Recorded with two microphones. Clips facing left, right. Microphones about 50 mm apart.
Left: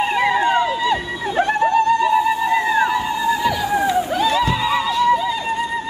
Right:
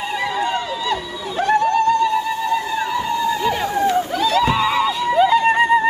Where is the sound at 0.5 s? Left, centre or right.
Left.